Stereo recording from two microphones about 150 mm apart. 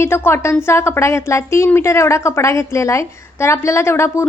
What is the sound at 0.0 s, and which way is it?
A woman's voice, 15° left (ahead or behind).